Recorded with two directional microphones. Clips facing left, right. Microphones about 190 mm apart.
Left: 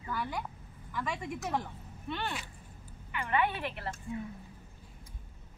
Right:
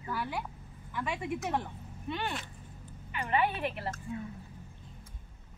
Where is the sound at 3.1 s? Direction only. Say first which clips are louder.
Right 1 dB; 25° right (ahead or behind).